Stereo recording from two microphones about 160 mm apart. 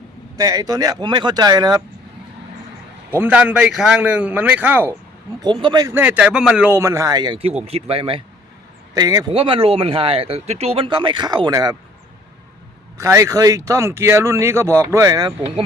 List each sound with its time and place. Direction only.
0.3 s speech: 20° right (ahead or behind)
3.1 s speech: 10° right (ahead or behind)
5.4 s speech: 30° right (ahead or behind)
5.9 s speech: 10° right (ahead or behind)
6.7 s speech: 15° right (ahead or behind); by 8.2 s 35° right (ahead or behind)
9.0 s speech: 20° right (ahead or behind)
9.3 s speech: 35° right (ahead or behind)
13.0 s speech: 20° right (ahead or behind)